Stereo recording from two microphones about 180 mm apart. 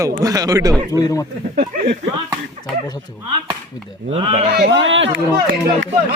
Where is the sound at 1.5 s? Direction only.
50° right (ahead or behind).